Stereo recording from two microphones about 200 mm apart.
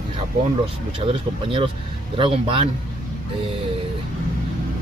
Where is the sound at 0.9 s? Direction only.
25° right (ahead or behind).